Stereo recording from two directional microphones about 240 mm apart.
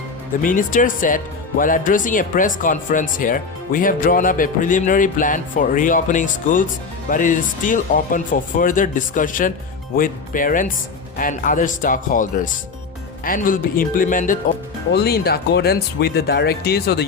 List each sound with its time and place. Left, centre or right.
0.4 s speech: left